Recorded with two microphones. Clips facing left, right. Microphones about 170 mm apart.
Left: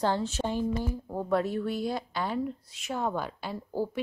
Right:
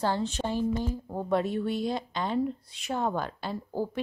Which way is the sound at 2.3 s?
5° left (ahead or behind).